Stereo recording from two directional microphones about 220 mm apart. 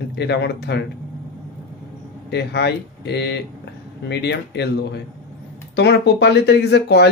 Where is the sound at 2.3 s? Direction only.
50° left (ahead or behind).